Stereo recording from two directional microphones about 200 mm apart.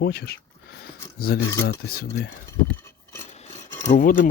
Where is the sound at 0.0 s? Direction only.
50° left (ahead or behind).